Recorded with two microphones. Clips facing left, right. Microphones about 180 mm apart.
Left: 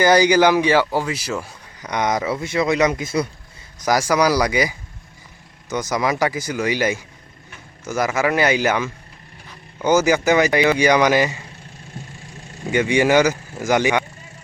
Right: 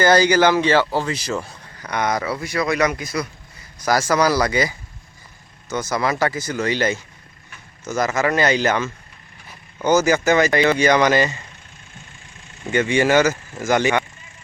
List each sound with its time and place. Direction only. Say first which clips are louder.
0.0 s speech: left 1 dB; 15° left (ahead or behind)
1.8 s speech: left 1 dB; 20° left (ahead or behind)
3.8 s speech: left 1 dB; 15° left (ahead or behind)
11.9 s vehicle: left 9 dB; 35° left (ahead or behind)
12.7 s speech: left 1 dB; 10° left (ahead or behind)